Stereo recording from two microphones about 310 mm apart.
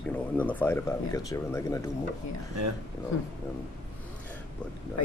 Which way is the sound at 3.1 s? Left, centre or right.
Left.